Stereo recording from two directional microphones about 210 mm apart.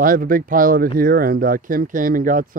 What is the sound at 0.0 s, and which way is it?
Speech, 40° right (ahead or behind).